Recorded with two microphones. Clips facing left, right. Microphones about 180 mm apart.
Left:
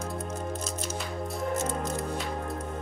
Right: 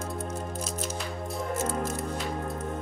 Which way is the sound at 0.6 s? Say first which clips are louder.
Even; centre (ahead or behind).